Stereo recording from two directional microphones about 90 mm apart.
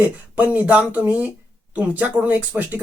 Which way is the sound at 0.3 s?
15° right (ahead or behind).